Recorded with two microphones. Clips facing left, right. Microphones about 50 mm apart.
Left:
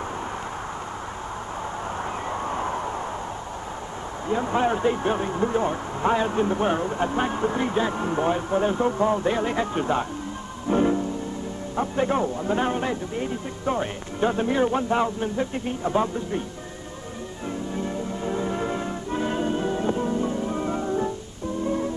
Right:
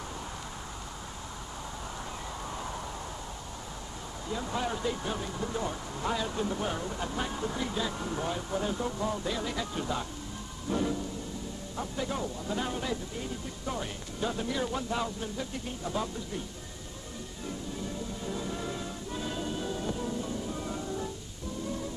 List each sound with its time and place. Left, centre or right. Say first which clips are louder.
2.4 s vehicle: left 10 dB; left
4.3 s speech: left 10 dB; left
10.7 s music: left 10 dB; left
11.7 s speech: left 11 dB; left
17.7 s music: left 9 dB; left